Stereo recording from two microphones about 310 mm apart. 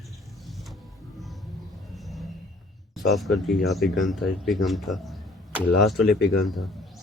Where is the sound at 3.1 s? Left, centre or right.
Centre.